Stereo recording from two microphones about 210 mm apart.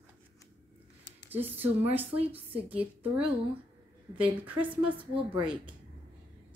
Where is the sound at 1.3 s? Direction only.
10° right (ahead or behind).